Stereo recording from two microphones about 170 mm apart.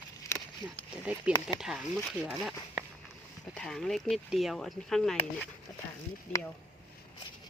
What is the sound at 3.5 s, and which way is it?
Speech, 5° left (ahead or behind).